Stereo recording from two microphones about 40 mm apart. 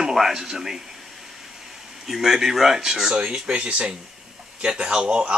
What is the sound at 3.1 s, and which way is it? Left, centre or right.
Speech, right.